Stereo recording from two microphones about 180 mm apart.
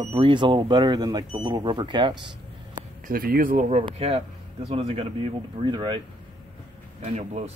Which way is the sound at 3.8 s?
30° right (ahead or behind).